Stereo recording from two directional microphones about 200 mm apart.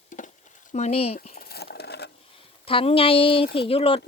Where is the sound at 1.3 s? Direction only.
50° left (ahead or behind).